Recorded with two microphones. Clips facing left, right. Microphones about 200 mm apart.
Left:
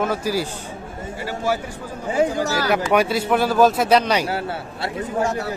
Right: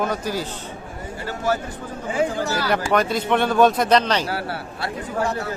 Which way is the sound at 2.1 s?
40° left (ahead or behind).